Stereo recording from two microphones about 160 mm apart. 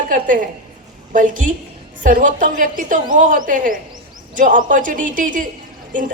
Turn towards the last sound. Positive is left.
turn(degrees=-55)  # may be behind; listen again after turning